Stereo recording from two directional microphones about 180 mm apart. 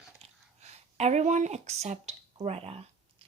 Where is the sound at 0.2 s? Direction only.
35° right (ahead or behind).